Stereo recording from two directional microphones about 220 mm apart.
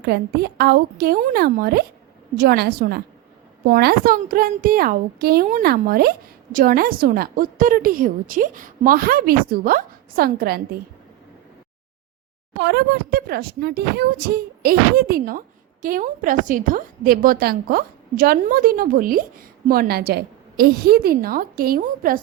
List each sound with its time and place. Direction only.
0.0 s a woman's voice: 45° right (ahead or behind)
12.5 s speech: 50° right (ahead or behind)